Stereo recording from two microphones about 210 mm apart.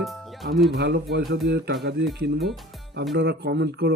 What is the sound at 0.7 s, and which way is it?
Speech, 50° right (ahead or behind).